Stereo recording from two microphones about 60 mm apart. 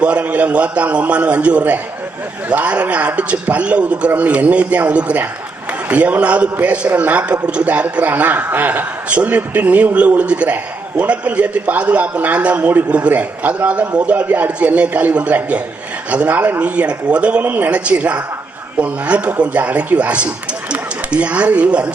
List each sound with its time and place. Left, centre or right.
0.0 s a man's voice: right